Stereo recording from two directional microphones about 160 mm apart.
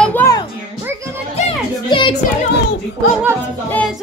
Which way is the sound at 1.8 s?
30° left (ahead or behind).